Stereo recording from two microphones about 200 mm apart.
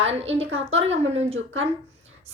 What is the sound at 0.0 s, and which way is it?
A woman's voice, 30° right (ahead or behind).